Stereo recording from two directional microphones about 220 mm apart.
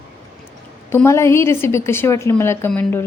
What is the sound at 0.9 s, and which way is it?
A woman's voice, 10° left (ahead or behind).